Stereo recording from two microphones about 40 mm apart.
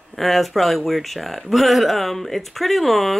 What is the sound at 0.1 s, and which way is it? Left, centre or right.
Speech, centre.